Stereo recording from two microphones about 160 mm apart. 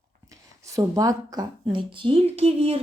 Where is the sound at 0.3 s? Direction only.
20° right (ahead or behind).